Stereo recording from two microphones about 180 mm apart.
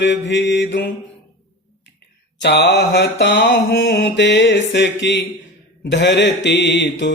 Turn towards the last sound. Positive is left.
turn(degrees=80)